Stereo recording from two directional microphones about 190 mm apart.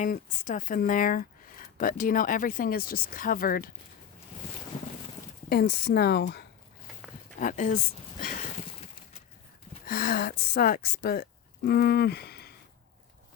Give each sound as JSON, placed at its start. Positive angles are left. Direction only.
{"t": 0.0, "sound": "speech", "side_deg": 45}
{"t": 5.5, "sound": "a woman's voice", "side_deg": 55}
{"t": 7.3, "sound": "speech", "side_deg": 40}
{"t": 9.8, "sound": "speech", "side_deg": 50}